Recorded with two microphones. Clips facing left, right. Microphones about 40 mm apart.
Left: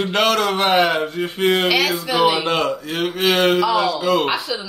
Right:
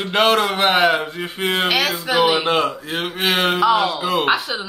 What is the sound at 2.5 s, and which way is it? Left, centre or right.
A man's voice, centre.